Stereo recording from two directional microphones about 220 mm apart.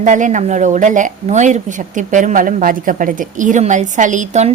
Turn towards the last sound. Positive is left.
turn(degrees=-35)  # may be behind; listen again after turning